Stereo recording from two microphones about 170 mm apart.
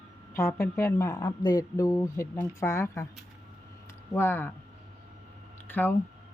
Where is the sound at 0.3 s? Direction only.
20° left (ahead or behind).